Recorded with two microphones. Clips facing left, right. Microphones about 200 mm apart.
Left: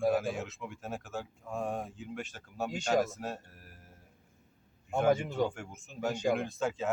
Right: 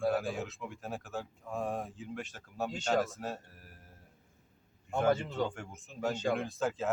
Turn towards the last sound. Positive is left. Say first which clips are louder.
# even
turn(degrees=0)  # may be behind; listen again after turning